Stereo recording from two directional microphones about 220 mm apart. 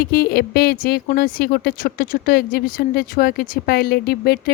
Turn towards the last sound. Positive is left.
turn(degrees=45)  # may be behind; listen again after turning